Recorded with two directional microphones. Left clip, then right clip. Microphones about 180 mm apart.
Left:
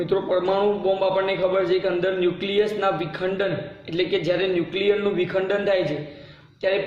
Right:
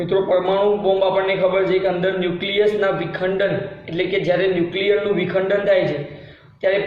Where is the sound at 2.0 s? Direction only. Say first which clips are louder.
Right 2 dB; 50° left (ahead or behind).